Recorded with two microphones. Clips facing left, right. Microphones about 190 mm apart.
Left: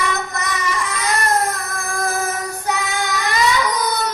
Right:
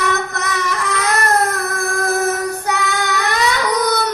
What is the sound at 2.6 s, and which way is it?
Child singing, 65° right (ahead or behind).